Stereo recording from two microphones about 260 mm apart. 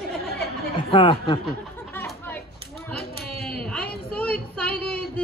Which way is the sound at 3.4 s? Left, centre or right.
Centre.